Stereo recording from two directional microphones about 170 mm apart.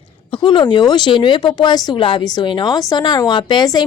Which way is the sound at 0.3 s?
30° left (ahead or behind).